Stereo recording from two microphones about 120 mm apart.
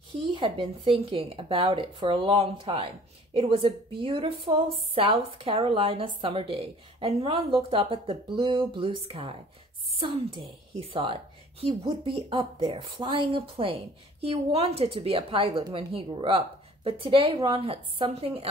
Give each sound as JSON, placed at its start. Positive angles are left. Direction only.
{"t": 0.1, "sound": "a woman's voice", "side_deg": -50}